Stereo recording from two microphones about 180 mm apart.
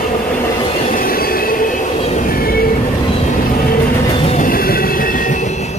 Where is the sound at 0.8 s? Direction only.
55° left (ahead or behind).